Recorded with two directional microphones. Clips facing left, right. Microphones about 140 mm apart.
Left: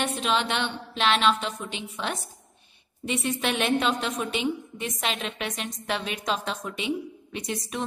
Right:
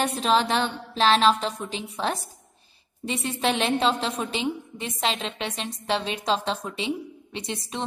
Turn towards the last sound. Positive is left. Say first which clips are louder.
# even
turn(degrees=-25)  # may be behind; listen again after turning